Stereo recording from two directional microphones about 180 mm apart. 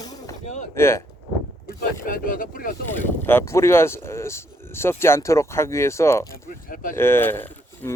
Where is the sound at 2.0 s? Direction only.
50° left (ahead or behind).